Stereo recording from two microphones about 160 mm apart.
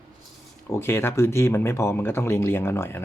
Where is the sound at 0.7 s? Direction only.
15° left (ahead or behind).